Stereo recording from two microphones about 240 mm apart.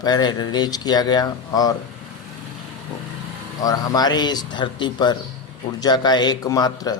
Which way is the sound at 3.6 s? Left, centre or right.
Centre.